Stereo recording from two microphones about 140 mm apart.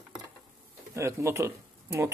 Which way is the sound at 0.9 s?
20° right (ahead or behind).